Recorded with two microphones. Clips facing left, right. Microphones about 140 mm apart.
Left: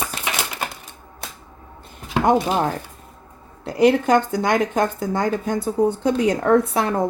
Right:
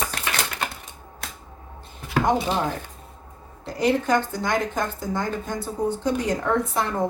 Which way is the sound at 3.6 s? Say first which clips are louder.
Left 6 dB; 60° left (ahead or behind).